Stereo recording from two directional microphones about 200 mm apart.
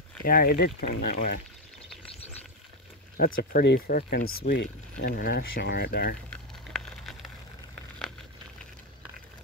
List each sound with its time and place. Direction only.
0.2 s speech: 45° left (ahead or behind)
3.3 s speech: 45° left (ahead or behind)
6.3 s a sound: 5° left (ahead or behind)